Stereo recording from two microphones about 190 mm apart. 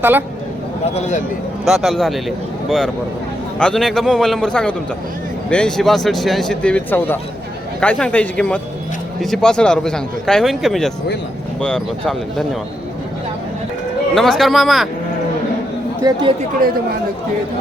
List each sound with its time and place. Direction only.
0.0 s speech: 10° right (ahead or behind)
0.9 s speech: 40° left (ahead or behind)
1.6 s speech: centre (ahead or behind)
14.2 s speech: centre (ahead or behind)
16.0 s speech: 20° right (ahead or behind)